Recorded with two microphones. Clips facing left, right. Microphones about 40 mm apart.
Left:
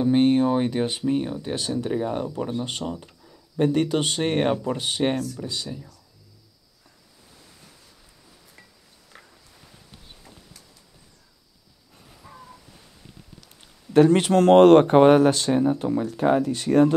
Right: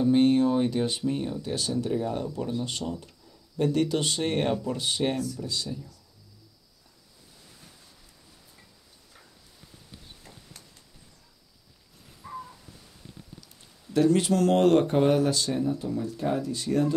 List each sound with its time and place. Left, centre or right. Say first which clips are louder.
0.0 s speech: left 2 dB; left
13.9 s speech: left 6 dB; left